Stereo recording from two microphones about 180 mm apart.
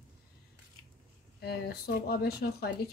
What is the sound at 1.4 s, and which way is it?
A woman's voice, 65° left (ahead or behind).